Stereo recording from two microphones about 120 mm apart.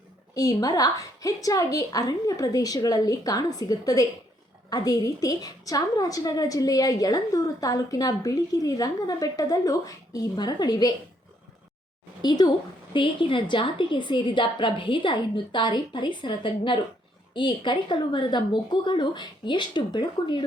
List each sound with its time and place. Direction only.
0.3 s a woman's voice: 30° left (ahead or behind)
12.2 s a woman's voice: 35° left (ahead or behind)